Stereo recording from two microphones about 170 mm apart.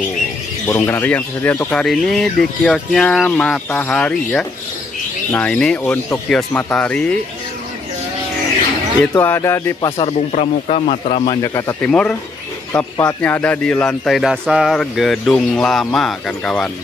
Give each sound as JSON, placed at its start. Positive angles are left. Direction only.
{"t": 0.7, "sound": "speech", "side_deg": 15}
{"t": 9.1, "sound": "speech", "side_deg": 15}
{"t": 9.9, "sound": "speech", "side_deg": 40}
{"t": 11.4, "sound": "speech", "side_deg": 20}
{"t": 11.8, "sound": "a man's voice", "side_deg": 5}